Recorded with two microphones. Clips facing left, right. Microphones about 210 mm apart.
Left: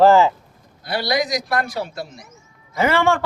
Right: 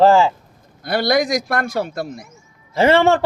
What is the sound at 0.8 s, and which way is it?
A man's voice, 50° right (ahead or behind).